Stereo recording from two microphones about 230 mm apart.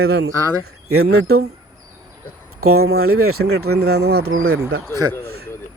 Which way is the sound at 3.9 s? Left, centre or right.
Right.